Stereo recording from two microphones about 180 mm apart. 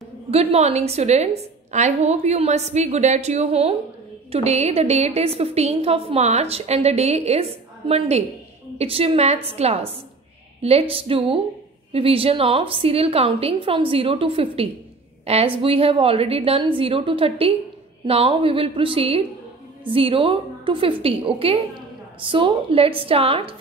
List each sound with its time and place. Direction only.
0.3 s a woman's voice: 35° right (ahead or behind)